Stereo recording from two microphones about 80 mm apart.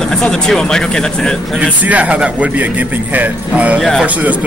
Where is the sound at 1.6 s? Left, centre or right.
Centre.